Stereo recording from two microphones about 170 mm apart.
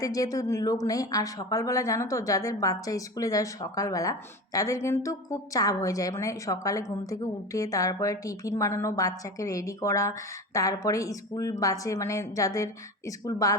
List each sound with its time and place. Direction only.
0.0 s a woman's voice: 20° left (ahead or behind)